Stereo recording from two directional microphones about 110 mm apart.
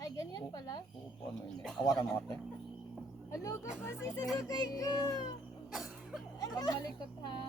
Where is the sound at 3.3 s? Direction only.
30° left (ahead or behind).